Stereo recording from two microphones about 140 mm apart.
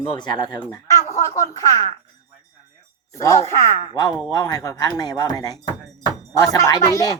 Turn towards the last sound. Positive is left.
turn(degrees=25)  # may be behind; listen again after turning